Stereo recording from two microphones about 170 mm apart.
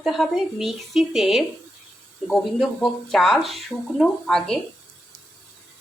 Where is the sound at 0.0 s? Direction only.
Centre (ahead or behind).